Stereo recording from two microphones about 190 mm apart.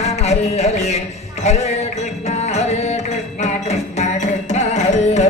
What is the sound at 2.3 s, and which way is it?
Music, 35° left (ahead or behind).